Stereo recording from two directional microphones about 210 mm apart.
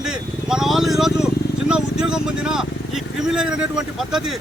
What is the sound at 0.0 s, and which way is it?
Vehicle, 5° right (ahead or behind).